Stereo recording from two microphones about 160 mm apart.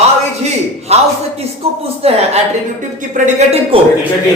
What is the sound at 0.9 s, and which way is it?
A man's voice, 40° right (ahead or behind).